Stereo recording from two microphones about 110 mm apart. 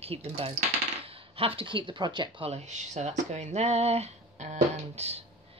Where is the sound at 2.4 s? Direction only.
85° right.